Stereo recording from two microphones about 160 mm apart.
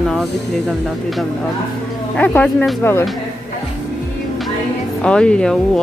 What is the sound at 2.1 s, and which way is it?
Speech, 10° left (ahead or behind).